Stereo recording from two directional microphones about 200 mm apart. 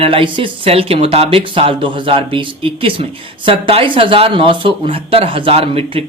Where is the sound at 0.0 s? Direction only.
25° right (ahead or behind).